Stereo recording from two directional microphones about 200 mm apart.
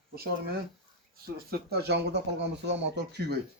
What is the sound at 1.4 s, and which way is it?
Speech, 50° right (ahead or behind).